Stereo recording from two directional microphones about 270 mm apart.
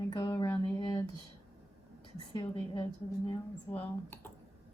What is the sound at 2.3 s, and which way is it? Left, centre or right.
A woman's voice, centre.